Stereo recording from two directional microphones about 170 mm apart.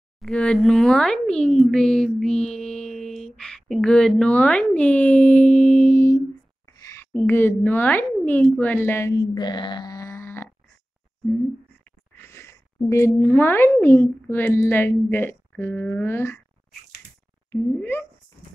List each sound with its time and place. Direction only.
0.2 s a woman's voice: 5° left (ahead or behind)
12.2 s a sound: 15° left (ahead or behind)
12.9 s speech: 15° left (ahead or behind)
17.5 s speech: 15° left (ahead or behind)